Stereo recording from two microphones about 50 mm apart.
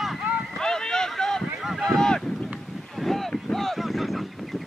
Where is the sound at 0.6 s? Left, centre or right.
Centre.